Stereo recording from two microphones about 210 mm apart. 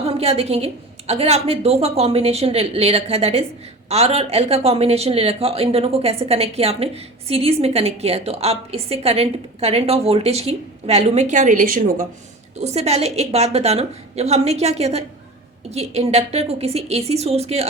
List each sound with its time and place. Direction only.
0.0 s a woman's voice: 30° right (ahead or behind)